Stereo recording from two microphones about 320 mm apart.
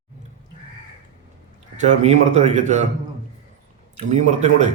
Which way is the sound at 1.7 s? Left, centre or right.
Right.